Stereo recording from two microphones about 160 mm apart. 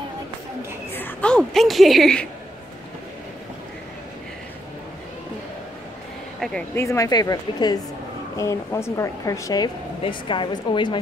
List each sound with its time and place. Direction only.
0.9 s a woman's voice: 10° left (ahead or behind)
6.7 s speech: 15° left (ahead or behind)